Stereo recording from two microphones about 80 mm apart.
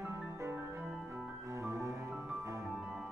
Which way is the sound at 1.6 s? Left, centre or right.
Right.